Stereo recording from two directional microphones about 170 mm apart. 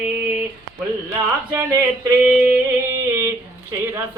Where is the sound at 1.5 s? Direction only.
15° right (ahead or behind).